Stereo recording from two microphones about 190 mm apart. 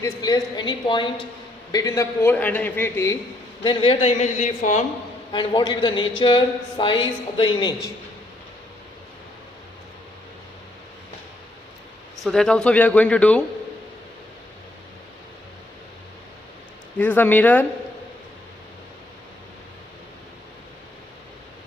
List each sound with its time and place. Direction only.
0.0 s a man's voice: 20° left (ahead or behind)
3.6 s a woman's voice: 25° left (ahead or behind)
5.3 s speech: 25° left (ahead or behind)
12.2 s speech: 5° left (ahead or behind)
17.0 s a man's voice: 10° left (ahead or behind)